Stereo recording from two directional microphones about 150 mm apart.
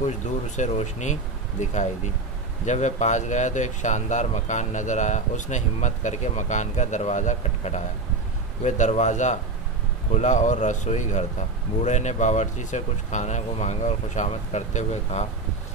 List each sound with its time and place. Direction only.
0.6 s speech: 50° left (ahead or behind)